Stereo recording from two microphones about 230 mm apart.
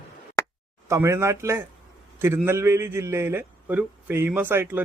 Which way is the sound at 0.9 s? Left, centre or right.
Centre.